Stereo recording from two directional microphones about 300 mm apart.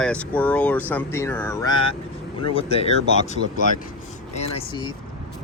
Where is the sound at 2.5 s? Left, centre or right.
Centre.